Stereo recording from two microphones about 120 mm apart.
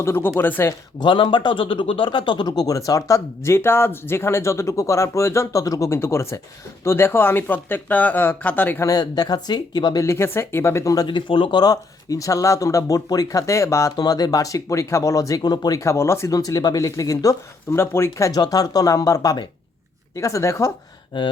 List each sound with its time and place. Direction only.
0.0 s speech: 20° left (ahead or behind)
0.9 s speech: 40° left (ahead or behind); by 8.9 s 15° left (ahead or behind)
8.9 s speech: 35° left (ahead or behind)
10.0 s speech: 20° left (ahead or behind)
15.4 s speech: 35° left (ahead or behind)